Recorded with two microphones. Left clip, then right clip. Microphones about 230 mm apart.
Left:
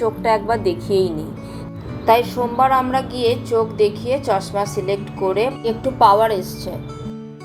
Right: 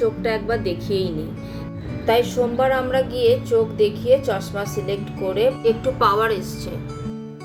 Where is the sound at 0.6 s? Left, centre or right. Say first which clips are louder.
Left 5 dB; right.